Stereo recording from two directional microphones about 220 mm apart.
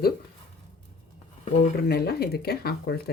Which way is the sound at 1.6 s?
45° left (ahead or behind).